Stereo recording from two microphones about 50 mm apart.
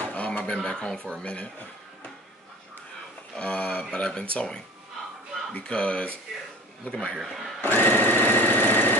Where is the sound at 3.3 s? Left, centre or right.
Left.